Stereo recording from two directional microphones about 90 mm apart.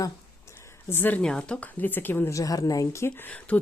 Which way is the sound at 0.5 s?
30° left (ahead or behind).